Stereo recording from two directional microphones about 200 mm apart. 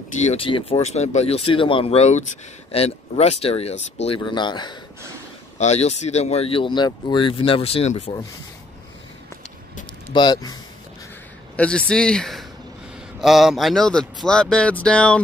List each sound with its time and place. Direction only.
0.2 s speech: 30° left (ahead or behind)
5.6 s speech: 35° left (ahead or behind)
10.1 s speech: 20° left (ahead or behind)
11.5 s speech: 5° left (ahead or behind)